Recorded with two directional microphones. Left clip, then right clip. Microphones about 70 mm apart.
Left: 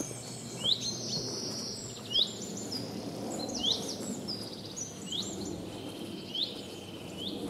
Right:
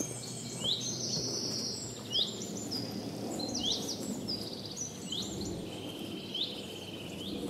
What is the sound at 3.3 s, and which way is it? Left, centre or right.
Bird, centre.